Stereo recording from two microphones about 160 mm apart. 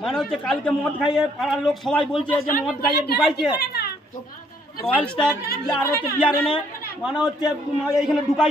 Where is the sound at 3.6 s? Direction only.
75° left (ahead or behind).